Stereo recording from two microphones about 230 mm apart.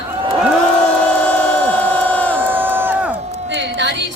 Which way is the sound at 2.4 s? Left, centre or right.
Centre.